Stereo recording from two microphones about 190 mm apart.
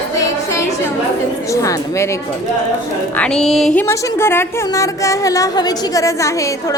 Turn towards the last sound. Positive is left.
turn(degrees=15)  # may be behind; listen again after turning